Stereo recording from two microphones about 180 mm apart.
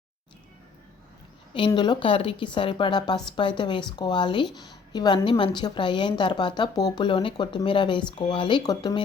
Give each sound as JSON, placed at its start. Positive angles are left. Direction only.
{"t": 1.5, "sound": "a woman's voice", "side_deg": 25}